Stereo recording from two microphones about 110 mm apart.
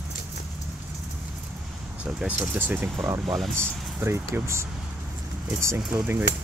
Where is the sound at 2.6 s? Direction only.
15° right (ahead or behind).